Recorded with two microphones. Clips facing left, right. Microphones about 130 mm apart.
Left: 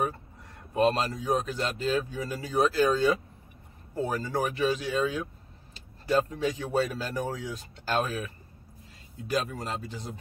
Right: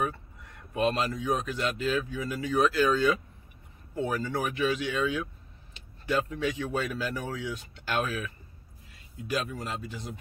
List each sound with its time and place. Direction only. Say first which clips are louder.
0.7 s a man's voice: left 2 dB; 35° left (ahead or behind)
9.3 s a man's voice: left 2 dB; 40° left (ahead or behind)